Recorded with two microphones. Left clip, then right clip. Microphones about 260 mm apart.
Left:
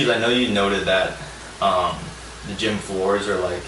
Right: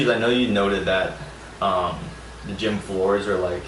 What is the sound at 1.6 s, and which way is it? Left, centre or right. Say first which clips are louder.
Speech: left 3 dB; right.